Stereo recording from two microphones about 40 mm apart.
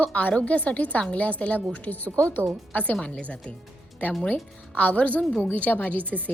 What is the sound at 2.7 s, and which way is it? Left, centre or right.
Speech, left.